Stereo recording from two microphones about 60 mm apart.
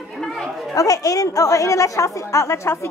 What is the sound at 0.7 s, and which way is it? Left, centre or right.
A woman's voice, left.